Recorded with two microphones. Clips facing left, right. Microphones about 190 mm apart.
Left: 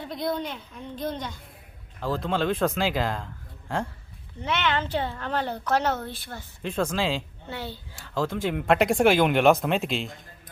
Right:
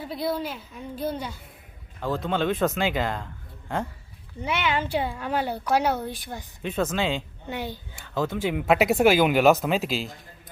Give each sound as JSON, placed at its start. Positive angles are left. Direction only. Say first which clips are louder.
{"t": 0.0, "sound": "speech", "louder": "right 1 dB", "side_deg": -5}
{"t": 4.4, "sound": "a woman's voice", "louder": "even", "side_deg": -10}
{"t": 6.6, "sound": "speech", "louder": "even", "side_deg": 0}
{"t": 7.4, "sound": "a woman's voice", "louder": "right 3 dB", "side_deg": -15}
{"t": 7.9, "sound": "speech", "louder": "even", "side_deg": 0}